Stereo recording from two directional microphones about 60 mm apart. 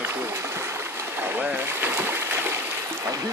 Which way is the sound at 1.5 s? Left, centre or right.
Right.